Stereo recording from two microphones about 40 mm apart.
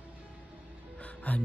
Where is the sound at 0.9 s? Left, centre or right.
Left.